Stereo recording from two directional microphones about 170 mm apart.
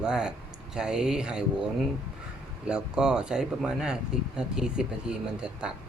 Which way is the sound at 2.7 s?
5° right (ahead or behind).